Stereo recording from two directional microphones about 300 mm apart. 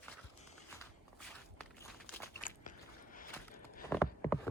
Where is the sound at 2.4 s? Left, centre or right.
Left.